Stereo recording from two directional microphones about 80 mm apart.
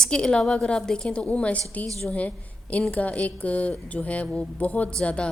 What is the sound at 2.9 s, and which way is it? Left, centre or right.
Mantra, centre.